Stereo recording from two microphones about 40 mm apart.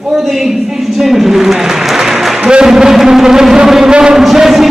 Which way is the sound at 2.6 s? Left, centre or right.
Centre.